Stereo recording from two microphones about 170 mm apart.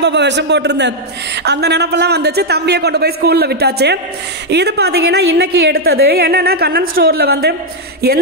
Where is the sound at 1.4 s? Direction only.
80° right.